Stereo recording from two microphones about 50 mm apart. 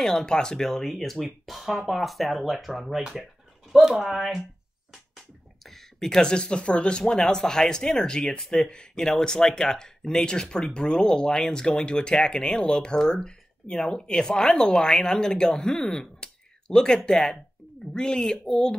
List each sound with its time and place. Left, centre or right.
0.0 s speech: centre
5.7 s speech: centre